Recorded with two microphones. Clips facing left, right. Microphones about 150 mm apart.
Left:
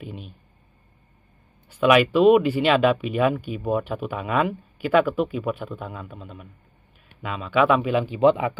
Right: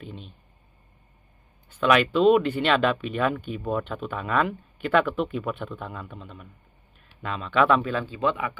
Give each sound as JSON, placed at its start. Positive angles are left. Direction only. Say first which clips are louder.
{"t": 0.0, "sound": "a sound", "louder": "left 3 dB", "side_deg": 10}
{"t": 1.7, "sound": "speech", "louder": "left 4 dB", "side_deg": 10}
{"t": 7.9, "sound": "a man's voice", "louder": "left 8 dB", "side_deg": 20}